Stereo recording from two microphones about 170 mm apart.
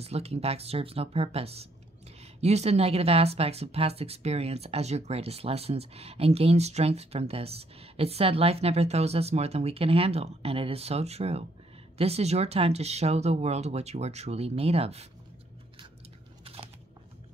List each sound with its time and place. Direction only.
0.0 s speech: 35° right (ahead or behind)
16.5 s biting: 35° right (ahead or behind)